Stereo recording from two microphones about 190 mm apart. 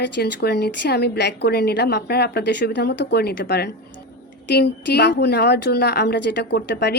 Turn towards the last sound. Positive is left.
turn(degrees=60)  # may be behind; listen again after turning